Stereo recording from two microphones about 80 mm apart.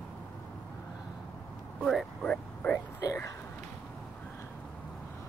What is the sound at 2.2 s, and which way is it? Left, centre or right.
Vehicle, centre.